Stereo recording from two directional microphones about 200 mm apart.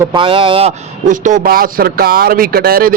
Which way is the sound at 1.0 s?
40° right (ahead or behind).